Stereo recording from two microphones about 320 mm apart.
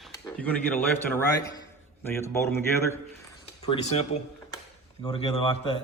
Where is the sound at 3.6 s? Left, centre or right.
Centre.